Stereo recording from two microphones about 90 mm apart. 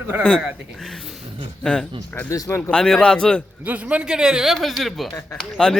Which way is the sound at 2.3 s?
30° left (ahead or behind).